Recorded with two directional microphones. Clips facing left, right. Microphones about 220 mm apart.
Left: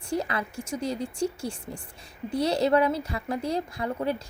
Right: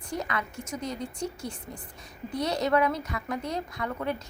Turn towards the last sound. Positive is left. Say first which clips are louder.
# left 3 dB
turn(degrees=30)  # may be behind; listen again after turning